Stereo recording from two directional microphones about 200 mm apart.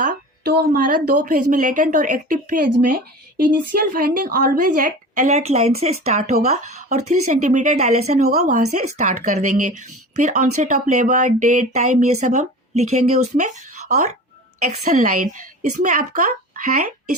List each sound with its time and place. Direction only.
0.0 s a woman's voice: 45° right (ahead or behind)